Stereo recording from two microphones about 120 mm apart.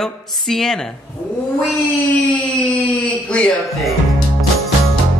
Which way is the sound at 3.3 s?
10° left (ahead or behind).